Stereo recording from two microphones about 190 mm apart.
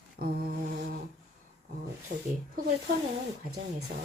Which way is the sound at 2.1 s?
70° right (ahead or behind).